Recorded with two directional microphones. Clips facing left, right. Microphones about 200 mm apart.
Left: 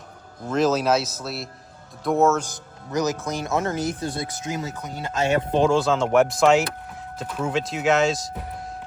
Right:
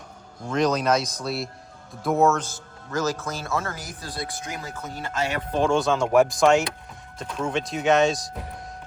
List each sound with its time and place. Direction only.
0.4 s a man's voice: 5° left (ahead or behind)
2.4 s speech: 15° left (ahead or behind)
5.6 s a man's voice: centre (ahead or behind)